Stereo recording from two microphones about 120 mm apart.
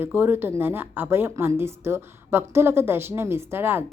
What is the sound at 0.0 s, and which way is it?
A woman's voice, 20° right (ahead or behind).